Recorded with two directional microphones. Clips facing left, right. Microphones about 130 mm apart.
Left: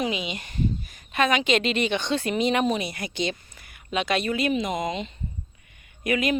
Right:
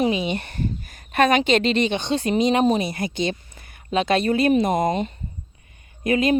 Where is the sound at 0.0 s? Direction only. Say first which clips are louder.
Right 6 dB; 35° right (ahead or behind).